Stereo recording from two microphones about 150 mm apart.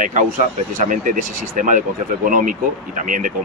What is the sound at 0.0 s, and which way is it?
Speech, 55° right (ahead or behind).